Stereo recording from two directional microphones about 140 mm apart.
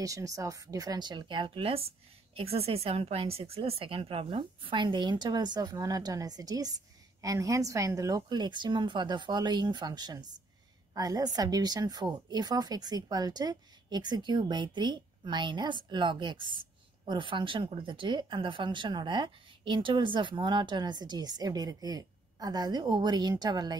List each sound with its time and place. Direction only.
0.0 s a woman's voice: 25° right (ahead or behind)